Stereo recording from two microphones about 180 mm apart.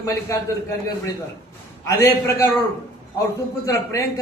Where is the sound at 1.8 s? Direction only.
15° left (ahead or behind).